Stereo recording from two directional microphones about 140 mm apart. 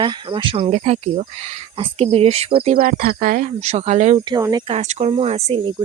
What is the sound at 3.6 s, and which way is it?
Speech, 50° right (ahead or behind).